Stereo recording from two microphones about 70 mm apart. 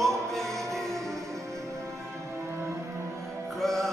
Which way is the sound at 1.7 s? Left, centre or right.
Right.